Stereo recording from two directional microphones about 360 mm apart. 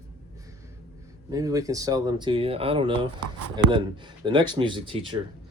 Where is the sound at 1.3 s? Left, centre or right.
Centre.